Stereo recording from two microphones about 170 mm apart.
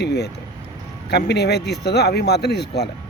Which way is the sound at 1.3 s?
75° left (ahead or behind).